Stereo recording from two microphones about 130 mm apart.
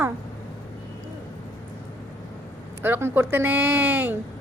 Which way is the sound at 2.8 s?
15° right (ahead or behind).